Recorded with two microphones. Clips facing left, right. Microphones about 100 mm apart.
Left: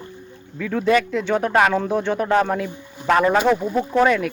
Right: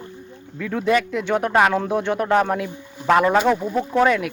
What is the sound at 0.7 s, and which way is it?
Speech, 10° right (ahead or behind).